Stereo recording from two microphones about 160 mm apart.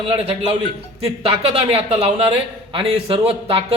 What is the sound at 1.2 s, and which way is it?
A man's voice, 40° right (ahead or behind).